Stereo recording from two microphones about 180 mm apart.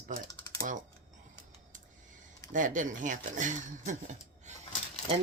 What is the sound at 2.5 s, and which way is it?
Speech, 45° right (ahead or behind).